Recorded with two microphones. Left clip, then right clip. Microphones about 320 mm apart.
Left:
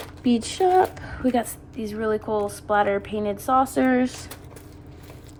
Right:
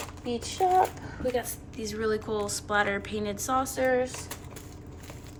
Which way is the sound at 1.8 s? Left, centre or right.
Centre.